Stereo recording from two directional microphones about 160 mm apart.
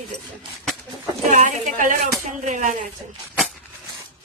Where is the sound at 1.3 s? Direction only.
50° right (ahead or behind).